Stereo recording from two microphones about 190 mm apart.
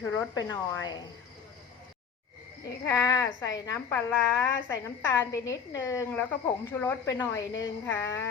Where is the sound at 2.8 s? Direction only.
15° left (ahead or behind).